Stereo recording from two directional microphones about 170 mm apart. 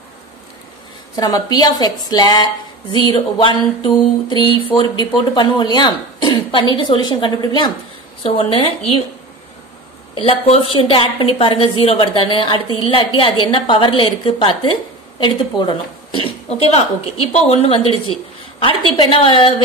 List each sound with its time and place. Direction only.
1.1 s a sound: 25° left (ahead or behind)
8.2 s a woman's voice: 30° left (ahead or behind)
10.1 s a woman's voice: 35° left (ahead or behind)